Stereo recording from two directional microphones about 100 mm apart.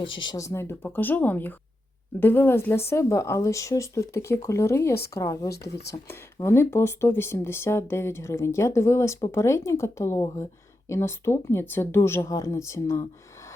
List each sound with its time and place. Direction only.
0.0 s speech: 55° left (ahead or behind)
0.3 s speech: 30° left (ahead or behind)